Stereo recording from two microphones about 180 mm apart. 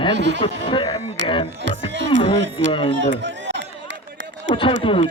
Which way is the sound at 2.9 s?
90° right.